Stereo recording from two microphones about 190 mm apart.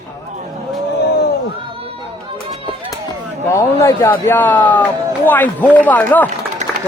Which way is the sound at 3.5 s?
15° left (ahead or behind).